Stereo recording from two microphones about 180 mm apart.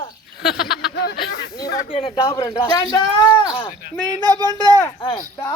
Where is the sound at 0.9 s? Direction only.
65° left (ahead or behind).